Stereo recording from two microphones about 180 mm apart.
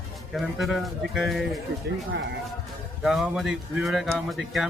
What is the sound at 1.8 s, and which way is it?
Speech, 70° right (ahead or behind).